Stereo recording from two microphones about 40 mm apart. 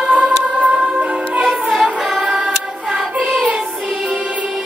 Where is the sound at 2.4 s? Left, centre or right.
Centre.